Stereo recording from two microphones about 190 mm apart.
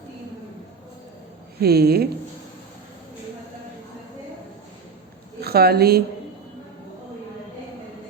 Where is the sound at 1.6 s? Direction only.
55° right (ahead or behind).